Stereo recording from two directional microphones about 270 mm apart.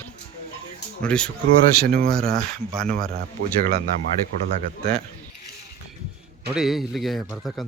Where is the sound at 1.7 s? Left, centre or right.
Right.